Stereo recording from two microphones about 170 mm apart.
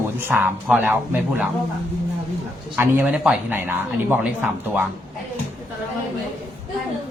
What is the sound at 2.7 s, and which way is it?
Speech, 10° right (ahead or behind).